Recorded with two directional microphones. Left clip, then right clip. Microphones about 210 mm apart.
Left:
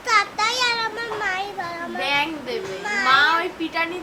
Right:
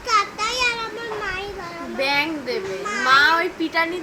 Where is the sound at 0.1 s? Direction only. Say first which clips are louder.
Left 1 dB; 15° left (ahead or behind).